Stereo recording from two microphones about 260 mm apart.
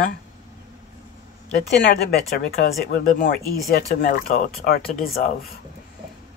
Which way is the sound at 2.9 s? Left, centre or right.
Left.